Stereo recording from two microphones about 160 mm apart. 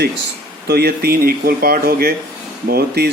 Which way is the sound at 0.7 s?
80° right.